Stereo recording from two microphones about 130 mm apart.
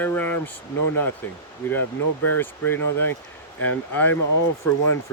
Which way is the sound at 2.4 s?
15° left (ahead or behind).